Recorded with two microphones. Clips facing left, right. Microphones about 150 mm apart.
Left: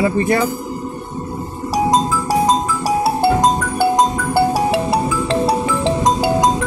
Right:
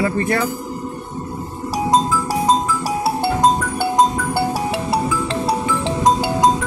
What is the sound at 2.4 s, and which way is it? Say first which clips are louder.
Music: left 1 dB; 90° left.